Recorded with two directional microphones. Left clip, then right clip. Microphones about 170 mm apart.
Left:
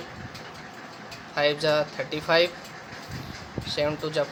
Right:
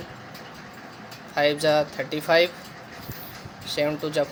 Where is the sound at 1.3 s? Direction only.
15° right (ahead or behind).